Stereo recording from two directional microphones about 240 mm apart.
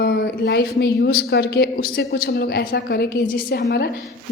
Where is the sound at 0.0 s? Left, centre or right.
Left.